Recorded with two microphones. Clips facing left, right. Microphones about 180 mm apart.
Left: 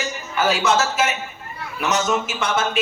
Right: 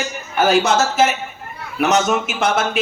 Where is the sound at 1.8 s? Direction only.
60° right (ahead or behind).